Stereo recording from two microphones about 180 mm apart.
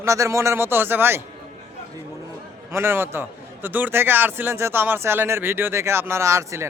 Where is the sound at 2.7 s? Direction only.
15° right (ahead or behind).